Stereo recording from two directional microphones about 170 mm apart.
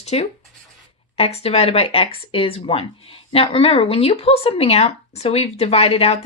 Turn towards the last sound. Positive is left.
turn(degrees=35)  # may be behind; listen again after turning